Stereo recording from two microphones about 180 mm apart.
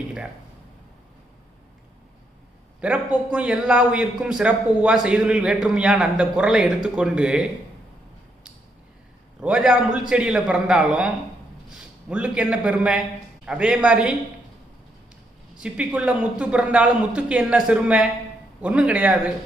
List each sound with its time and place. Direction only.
2.8 s a man's voice: 5° right (ahead or behind)
9.4 s a man's voice: 5° right (ahead or behind)
15.6 s a man's voice: 5° right (ahead or behind)